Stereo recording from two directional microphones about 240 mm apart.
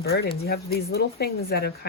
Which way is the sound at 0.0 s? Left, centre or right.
Left.